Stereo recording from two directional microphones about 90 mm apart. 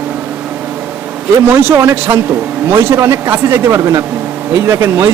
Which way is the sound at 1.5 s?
25° right (ahead or behind).